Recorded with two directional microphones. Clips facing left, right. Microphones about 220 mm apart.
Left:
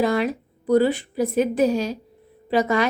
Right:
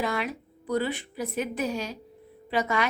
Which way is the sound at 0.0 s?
35° left (ahead or behind).